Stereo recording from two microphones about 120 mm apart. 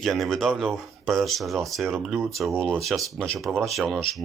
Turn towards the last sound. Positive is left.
turn(degrees=0)  # may be behind; listen again after turning